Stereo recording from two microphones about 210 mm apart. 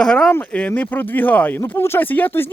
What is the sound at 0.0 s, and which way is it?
Speech, 5° left (ahead or behind).